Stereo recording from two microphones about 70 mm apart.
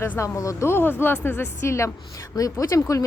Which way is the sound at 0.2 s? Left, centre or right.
Left.